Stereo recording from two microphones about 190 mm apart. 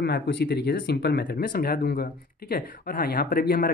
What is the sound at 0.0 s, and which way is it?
Speech, 60° left (ahead or behind).